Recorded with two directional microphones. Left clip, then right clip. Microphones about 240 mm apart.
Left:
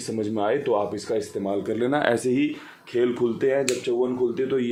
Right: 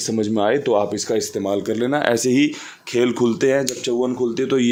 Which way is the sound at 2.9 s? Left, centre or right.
Right.